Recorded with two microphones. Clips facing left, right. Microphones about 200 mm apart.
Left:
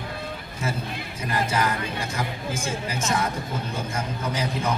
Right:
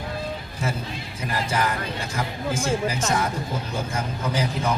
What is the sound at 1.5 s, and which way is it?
A man's voice, 30° right (ahead or behind).